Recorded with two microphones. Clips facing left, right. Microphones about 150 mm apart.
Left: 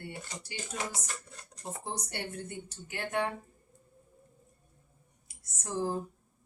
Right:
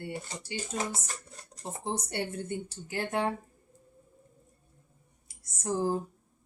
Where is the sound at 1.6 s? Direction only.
25° right (ahead or behind).